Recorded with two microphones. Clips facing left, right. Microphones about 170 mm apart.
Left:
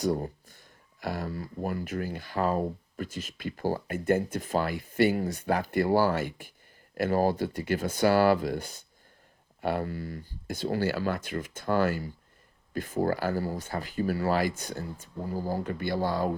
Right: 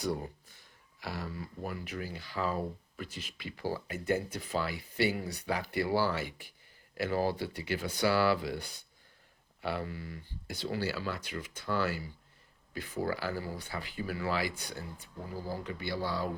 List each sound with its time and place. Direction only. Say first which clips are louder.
0.0 s speech: left 6 dB; 45° left (ahead or behind)